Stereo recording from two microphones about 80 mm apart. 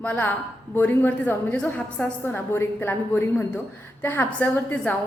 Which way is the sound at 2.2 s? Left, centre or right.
Left.